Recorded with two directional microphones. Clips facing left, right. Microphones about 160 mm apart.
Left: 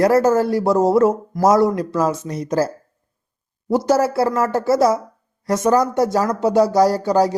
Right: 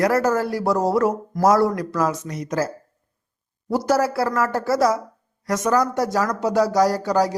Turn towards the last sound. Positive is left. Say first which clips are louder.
# left 3 dB
turn(degrees=25)  # may be behind; listen again after turning